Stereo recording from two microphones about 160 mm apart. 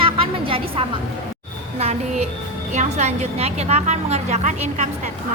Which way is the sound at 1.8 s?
45° right (ahead or behind).